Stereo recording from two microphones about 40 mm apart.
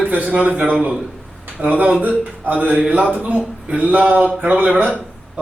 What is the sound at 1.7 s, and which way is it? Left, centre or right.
A man's voice, right.